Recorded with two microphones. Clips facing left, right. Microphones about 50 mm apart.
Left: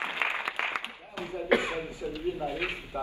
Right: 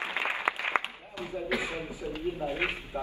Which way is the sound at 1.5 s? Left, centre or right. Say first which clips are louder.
Left 8 dB; left.